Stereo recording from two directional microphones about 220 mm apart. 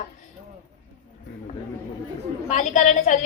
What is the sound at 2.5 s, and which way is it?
Speech, 35° left (ahead or behind).